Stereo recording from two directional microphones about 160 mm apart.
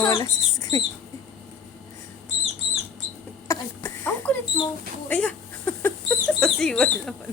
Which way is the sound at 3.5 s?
15° left (ahead or behind).